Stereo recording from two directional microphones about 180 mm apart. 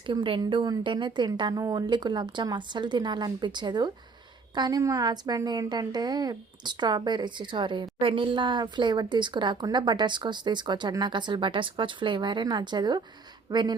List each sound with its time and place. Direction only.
0.1 s a woman's voice: 25° right (ahead or behind)